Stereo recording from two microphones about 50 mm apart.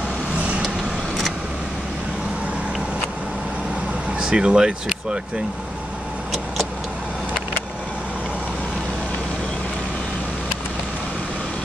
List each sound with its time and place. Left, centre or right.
4.2 s speech: centre